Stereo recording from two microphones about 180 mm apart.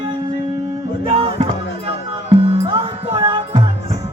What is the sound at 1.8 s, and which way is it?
Music, 30° right (ahead or behind).